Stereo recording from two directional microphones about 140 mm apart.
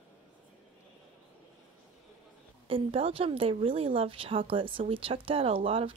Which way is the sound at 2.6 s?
45° right (ahead or behind).